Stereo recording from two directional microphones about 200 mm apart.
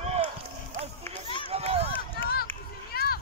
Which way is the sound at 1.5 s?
30° right (ahead or behind).